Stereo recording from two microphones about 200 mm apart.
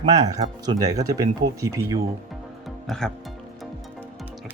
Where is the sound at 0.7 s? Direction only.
20° right (ahead or behind).